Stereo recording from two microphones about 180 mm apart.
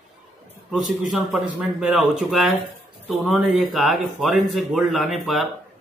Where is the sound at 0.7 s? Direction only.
Centre (ahead or behind).